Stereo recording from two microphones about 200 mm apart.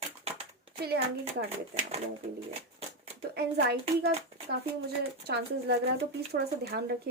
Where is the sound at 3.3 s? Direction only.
55° right (ahead or behind).